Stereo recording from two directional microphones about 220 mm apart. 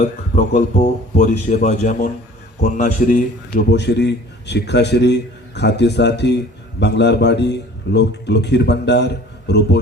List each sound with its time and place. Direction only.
0.0 s speech: 35° left (ahead or behind)
3.7 s a man's voice: 50° left (ahead or behind)